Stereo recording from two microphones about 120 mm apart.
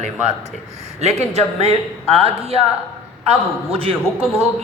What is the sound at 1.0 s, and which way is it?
A man's voice, 65° right (ahead or behind).